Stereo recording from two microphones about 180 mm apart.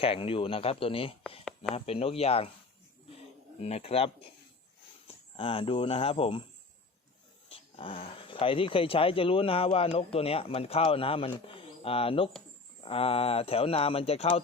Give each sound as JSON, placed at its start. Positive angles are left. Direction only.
{"t": 0.0, "sound": "speech", "side_deg": 30}
{"t": 3.6, "sound": "speech", "side_deg": 35}
{"t": 7.5, "sound": "speech", "side_deg": 30}